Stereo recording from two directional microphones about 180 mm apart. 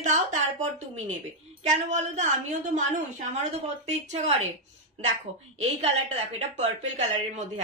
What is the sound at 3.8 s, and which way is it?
Speech, 40° right (ahead or behind).